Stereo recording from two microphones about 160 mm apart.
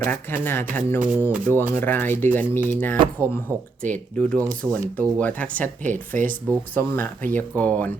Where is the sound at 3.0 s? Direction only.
30° right (ahead or behind).